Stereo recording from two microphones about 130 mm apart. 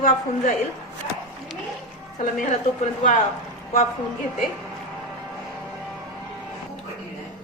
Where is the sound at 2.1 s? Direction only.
70° left (ahead or behind).